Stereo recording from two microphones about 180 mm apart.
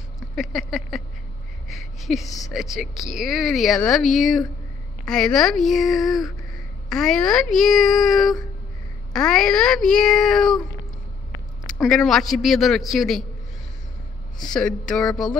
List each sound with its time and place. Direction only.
0.4 s speech: centre (ahead or behind)
1.7 s a sound: centre (ahead or behind)
2.2 s speech: 20° left (ahead or behind)
2.5 s speech: centre (ahead or behind)
11.6 s speech: centre (ahead or behind)
14.5 s speech: 5° left (ahead or behind)